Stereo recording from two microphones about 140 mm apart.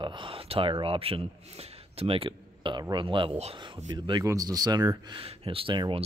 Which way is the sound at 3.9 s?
25° right (ahead or behind).